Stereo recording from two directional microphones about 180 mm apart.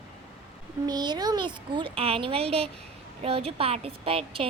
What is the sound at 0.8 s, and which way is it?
A woman's voice, 25° right (ahead or behind).